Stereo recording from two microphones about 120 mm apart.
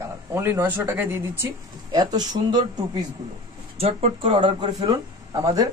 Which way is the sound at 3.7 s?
55° right (ahead or behind).